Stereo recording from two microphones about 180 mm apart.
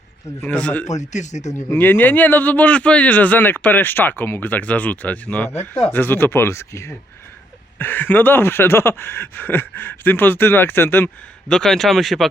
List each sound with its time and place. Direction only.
0.4 s speech: 5° left (ahead or behind)
0.9 s speech: 40° left (ahead or behind)
1.5 s speech: 10° left (ahead or behind)